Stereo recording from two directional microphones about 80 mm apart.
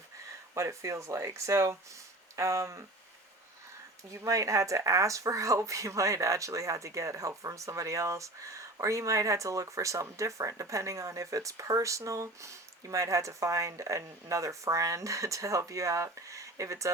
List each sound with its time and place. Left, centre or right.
0.5 s speech: right
4.1 s speech: right